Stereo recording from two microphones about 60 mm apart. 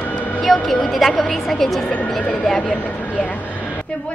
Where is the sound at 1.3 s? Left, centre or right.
Centre.